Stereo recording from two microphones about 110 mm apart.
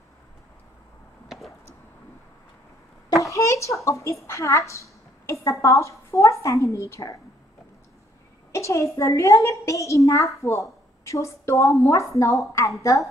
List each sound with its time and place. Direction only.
3.2 s a woman's voice: 30° left (ahead or behind)
8.5 s a woman's voice: 25° left (ahead or behind)